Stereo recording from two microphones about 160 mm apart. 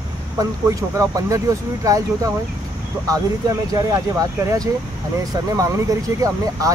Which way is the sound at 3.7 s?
20° right (ahead or behind).